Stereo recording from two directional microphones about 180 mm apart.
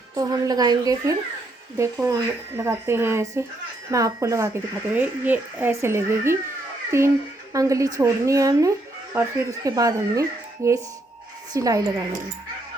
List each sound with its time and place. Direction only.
0.1 s a woman's voice: 20° right (ahead or behind)